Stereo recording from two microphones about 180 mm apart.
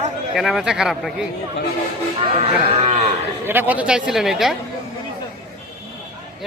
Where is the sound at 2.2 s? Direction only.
30° right (ahead or behind).